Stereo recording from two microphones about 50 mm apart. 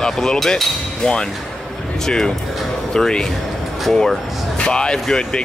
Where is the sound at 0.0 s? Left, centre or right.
Centre.